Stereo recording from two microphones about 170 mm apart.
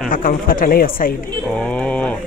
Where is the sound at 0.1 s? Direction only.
55° left (ahead or behind).